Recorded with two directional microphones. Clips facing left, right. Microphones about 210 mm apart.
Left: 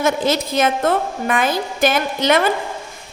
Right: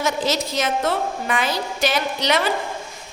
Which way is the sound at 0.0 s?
55° left (ahead or behind).